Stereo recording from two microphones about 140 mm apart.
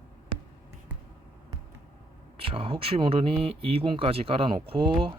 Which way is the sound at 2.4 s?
40° right (ahead or behind).